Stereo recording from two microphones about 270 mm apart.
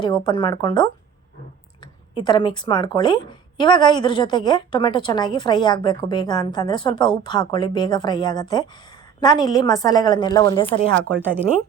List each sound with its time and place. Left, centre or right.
0.0 s a woman's voice: centre
11.1 s speech: centre